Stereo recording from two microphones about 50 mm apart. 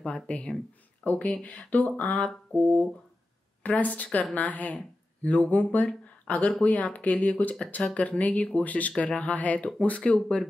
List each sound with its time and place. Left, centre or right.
0.0 s speech: left